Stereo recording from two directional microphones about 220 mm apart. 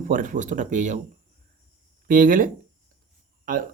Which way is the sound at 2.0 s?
40° right (ahead or behind).